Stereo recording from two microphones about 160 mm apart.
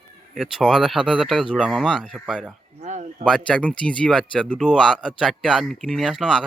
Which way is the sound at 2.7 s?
45° right (ahead or behind).